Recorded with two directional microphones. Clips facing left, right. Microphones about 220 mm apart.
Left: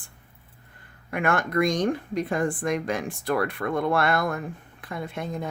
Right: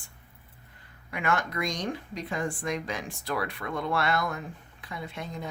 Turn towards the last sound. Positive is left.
turn(degrees=55)  # may be behind; listen again after turning